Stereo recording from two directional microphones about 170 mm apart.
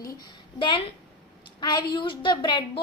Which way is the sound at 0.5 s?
30° left (ahead or behind).